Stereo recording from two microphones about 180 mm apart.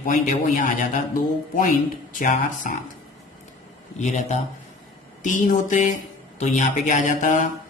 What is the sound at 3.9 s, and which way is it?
Speech, 40° left (ahead or behind).